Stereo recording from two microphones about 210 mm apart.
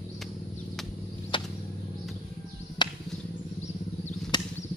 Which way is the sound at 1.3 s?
25° left (ahead or behind).